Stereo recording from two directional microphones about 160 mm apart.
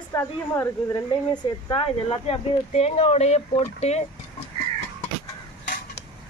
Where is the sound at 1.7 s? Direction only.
35° left (ahead or behind).